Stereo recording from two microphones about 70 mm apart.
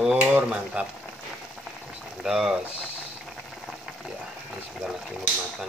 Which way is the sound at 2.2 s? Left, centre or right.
Centre.